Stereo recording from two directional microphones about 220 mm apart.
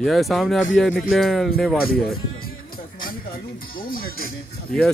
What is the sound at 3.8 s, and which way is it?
Speech, 40° left (ahead or behind).